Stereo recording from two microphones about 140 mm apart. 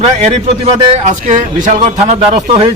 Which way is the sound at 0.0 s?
45° right (ahead or behind).